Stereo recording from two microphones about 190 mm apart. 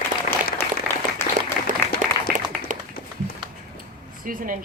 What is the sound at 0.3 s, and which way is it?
Applause, 45° left (ahead or behind).